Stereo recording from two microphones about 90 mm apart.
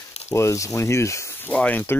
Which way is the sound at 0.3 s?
35° left (ahead or behind).